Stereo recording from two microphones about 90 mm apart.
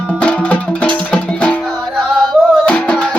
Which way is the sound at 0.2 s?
10° left (ahead or behind).